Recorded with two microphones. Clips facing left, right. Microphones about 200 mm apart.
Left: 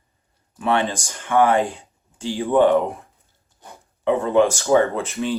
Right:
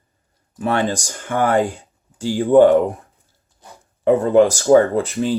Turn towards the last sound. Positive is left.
turn(degrees=-35)  # may be behind; listen again after turning